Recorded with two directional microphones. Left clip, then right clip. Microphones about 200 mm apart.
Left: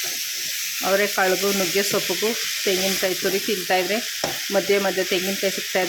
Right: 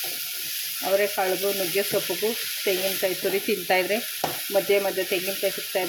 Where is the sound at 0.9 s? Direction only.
15° left (ahead or behind).